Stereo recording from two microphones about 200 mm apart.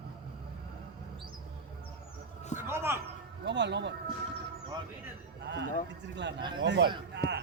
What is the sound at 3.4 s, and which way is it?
Speech, 60° right (ahead or behind).